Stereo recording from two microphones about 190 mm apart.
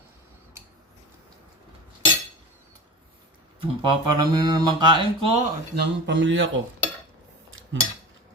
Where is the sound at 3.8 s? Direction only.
25° right (ahead or behind).